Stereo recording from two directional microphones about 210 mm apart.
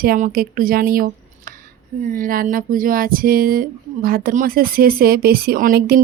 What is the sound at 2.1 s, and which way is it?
Speech, 40° right (ahead or behind).